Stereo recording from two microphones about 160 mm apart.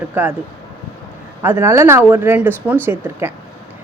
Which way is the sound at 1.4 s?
15° right (ahead or behind).